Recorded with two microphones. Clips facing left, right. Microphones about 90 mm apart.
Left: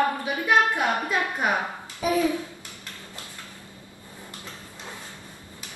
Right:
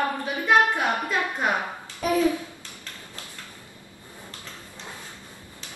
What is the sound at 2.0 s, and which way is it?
Speech, 5° left (ahead or behind).